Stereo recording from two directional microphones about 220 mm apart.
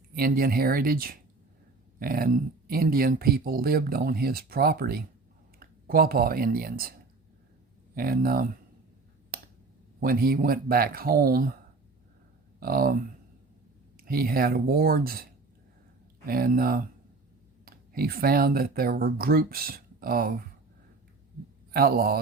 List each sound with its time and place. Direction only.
0.2 s speech: 40° right (ahead or behind)
7.9 s speech: 40° right (ahead or behind)
9.3 s finger snapping: 40° right (ahead or behind)
10.0 s speech: 40° right (ahead or behind)
12.5 s speech: 40° right (ahead or behind)
21.7 s speech: 45° right (ahead or behind)